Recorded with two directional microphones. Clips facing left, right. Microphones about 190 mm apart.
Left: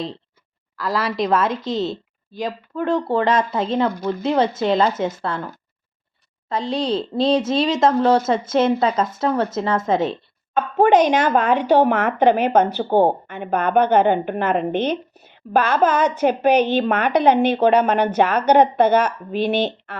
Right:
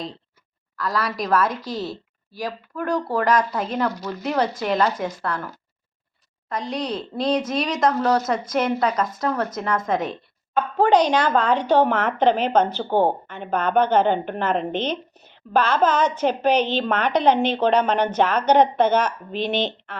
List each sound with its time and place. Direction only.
0.8 s a woman's voice: 25° left (ahead or behind)
6.5 s a woman's voice: 25° left (ahead or behind); by 19.6 s 5° left (ahead or behind)